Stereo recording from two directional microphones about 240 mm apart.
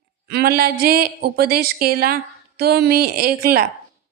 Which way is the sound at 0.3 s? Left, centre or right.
Right.